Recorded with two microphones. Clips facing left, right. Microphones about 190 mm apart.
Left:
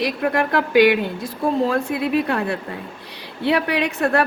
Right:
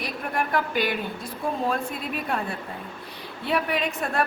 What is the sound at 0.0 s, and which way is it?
A woman's voice, 90° left.